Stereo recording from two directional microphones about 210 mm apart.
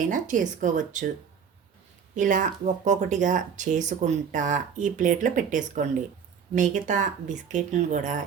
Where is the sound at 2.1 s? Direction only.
35° right (ahead or behind).